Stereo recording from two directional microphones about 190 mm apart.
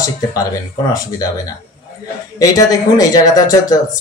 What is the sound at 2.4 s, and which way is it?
Speech, 20° left (ahead or behind).